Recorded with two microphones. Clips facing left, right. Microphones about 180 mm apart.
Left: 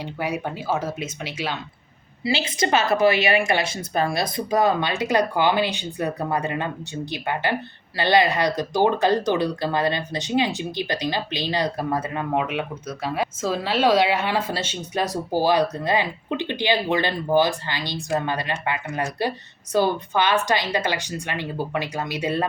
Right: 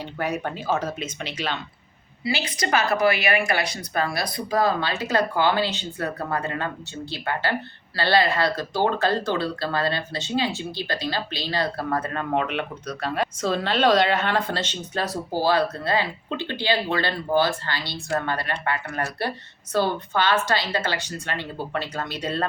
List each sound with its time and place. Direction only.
0.0 s speech: 10° left (ahead or behind)
2.2 s speech: 25° left (ahead or behind)